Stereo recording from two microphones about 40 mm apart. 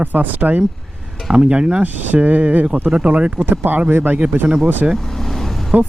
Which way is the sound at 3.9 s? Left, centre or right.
Right.